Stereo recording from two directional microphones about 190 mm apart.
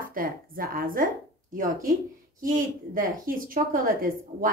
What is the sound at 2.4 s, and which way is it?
A woman's voice, 45° right (ahead or behind).